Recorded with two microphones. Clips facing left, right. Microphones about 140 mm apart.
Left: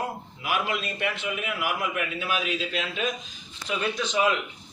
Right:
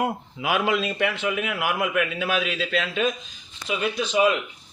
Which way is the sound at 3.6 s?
15° right (ahead or behind).